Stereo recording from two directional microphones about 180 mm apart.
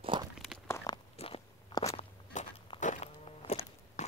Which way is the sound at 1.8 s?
40° left (ahead or behind).